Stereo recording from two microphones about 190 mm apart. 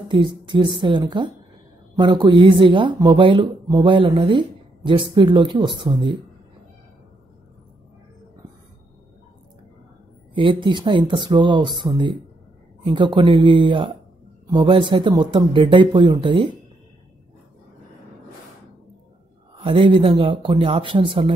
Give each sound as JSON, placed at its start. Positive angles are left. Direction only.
{"t": 0.1, "sound": "speech", "side_deg": -25}
{"t": 10.3, "sound": "speech", "side_deg": -25}
{"t": 19.5, "sound": "speech", "side_deg": -30}